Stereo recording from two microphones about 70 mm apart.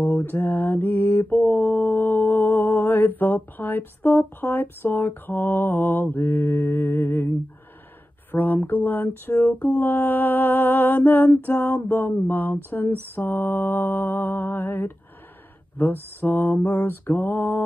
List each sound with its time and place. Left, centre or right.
0.0 s mantra: left
8.3 s speech: left
8.6 s mantra: left